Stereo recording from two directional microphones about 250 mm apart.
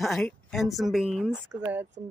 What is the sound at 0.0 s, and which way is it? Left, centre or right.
Speech, centre.